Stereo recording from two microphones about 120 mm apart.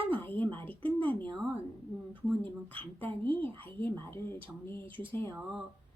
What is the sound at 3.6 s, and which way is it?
Speech, 20° left (ahead or behind).